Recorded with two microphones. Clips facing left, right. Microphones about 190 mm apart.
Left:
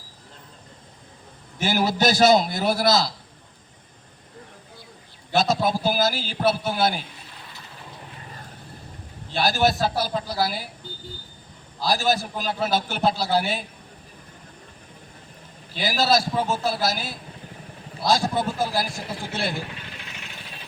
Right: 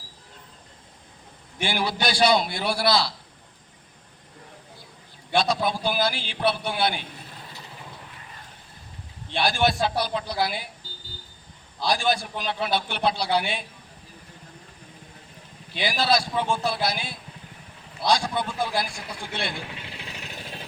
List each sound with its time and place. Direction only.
1.6 s a man's voice: 45° left (ahead or behind)
5.4 s a man's voice: 45° left (ahead or behind)
9.3 s a man's voice: 40° left (ahead or behind)
11.8 s a man's voice: 40° left (ahead or behind)
15.7 s a man's voice: 40° left (ahead or behind)
20.1 s vehicle: 35° right (ahead or behind)